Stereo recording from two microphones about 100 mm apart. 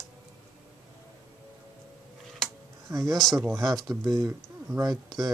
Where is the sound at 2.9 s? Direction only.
35° right (ahead or behind).